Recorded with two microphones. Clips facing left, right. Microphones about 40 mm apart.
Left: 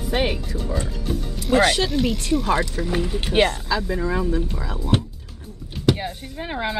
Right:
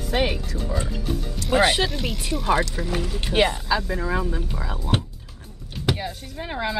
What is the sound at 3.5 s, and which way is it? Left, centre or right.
Speech, centre.